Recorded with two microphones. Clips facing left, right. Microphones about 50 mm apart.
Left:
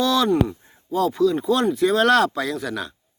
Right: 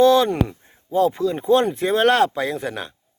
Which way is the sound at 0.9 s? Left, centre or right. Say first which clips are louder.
Even; right.